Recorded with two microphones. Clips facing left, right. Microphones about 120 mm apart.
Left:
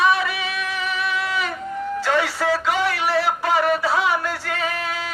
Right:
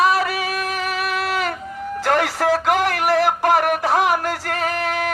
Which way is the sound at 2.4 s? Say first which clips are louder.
Right 3 dB; 50° right (ahead or behind).